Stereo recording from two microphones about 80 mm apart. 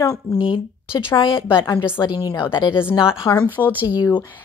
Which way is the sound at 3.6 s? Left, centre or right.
Left.